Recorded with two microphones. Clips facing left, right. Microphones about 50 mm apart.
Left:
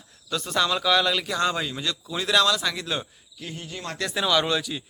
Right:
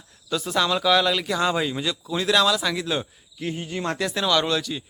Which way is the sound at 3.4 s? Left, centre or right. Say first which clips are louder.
Right 7 dB; right.